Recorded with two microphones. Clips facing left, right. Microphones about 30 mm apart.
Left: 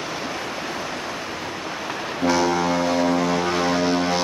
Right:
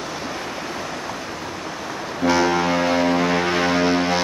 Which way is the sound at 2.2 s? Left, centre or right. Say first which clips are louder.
Right 2 dB; centre.